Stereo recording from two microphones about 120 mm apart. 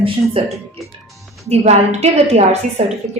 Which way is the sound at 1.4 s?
65° right (ahead or behind).